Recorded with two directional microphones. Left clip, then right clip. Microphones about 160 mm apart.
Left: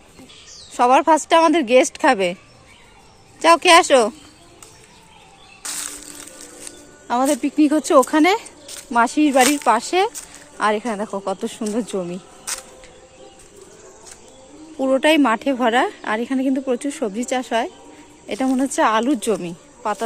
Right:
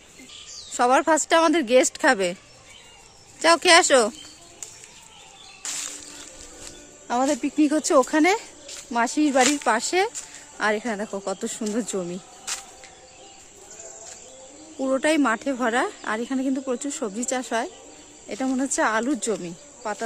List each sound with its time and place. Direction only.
0.7 s speech: 20° right (ahead or behind)
3.4 s speech: 20° right (ahead or behind)
5.6 s music: 90° left
7.1 s speech: 15° right (ahead or behind)
12.5 s insect: 90° left
14.8 s speech: 10° right (ahead or behind)